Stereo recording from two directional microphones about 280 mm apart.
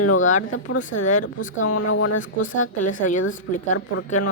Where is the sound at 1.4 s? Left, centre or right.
Left.